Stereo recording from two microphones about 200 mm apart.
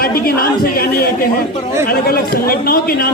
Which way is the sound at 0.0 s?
50° left (ahead or behind).